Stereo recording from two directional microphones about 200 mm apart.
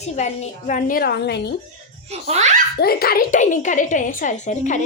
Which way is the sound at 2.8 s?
50° left (ahead or behind).